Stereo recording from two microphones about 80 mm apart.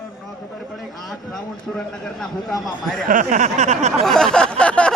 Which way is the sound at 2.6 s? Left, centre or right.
Centre.